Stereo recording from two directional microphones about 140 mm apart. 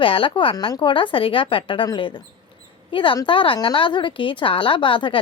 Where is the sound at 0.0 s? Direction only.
40° left (ahead or behind).